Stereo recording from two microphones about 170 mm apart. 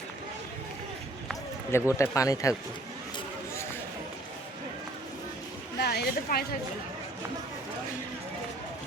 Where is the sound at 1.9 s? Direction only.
20° left (ahead or behind).